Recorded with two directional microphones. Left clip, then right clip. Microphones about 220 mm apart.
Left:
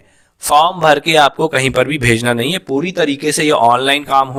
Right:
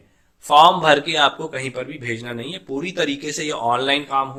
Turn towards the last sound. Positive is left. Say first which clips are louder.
# left 7 dB
turn(degrees=50)  # may be behind; listen again after turning